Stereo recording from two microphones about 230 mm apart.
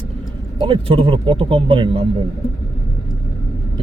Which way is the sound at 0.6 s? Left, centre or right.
Right.